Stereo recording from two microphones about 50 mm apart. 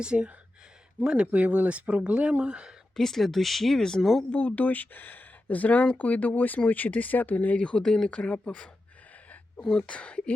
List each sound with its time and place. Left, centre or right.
0.0 s speech: centre
2.9 s speech: centre
4.3 s speech: left
7.8 s speech: centre
8.1 s speech: left
9.8 s speech: left